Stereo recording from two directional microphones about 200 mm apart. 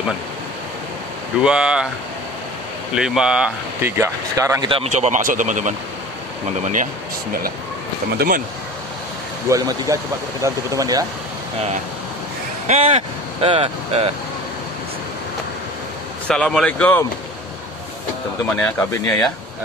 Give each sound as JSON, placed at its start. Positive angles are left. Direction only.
{"t": 1.4, "sound": "speech", "side_deg": -5}
{"t": 2.9, "sound": "speech", "side_deg": -5}
{"t": 9.5, "sound": "speech", "side_deg": -15}
{"t": 12.6, "sound": "speech", "side_deg": -30}
{"t": 16.3, "sound": "speech", "side_deg": 5}
{"t": 18.6, "sound": "speech", "side_deg": 10}